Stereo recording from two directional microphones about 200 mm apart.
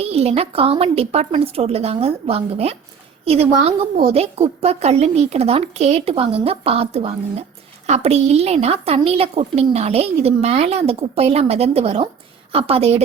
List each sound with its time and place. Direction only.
0.0 s a woman's voice: 30° right (ahead or behind)